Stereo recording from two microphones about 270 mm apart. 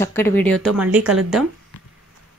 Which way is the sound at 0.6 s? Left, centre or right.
Centre.